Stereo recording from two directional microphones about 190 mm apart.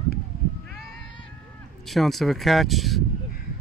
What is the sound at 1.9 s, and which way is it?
Speech, centre (ahead or behind).